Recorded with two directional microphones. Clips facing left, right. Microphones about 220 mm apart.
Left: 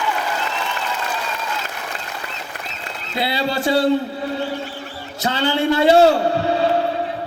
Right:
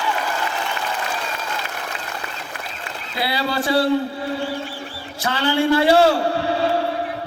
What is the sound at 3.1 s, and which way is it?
Speech, 25° left (ahead or behind).